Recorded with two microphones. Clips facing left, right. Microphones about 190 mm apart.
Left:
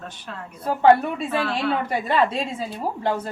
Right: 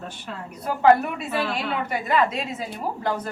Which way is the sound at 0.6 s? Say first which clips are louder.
Left 1 dB; 30° left (ahead or behind).